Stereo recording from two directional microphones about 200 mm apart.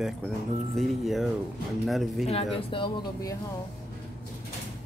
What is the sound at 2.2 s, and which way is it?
Speech, 25° left (ahead or behind).